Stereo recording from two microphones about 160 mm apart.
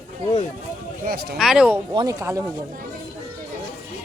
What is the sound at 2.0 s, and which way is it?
Speech, 20° right (ahead or behind).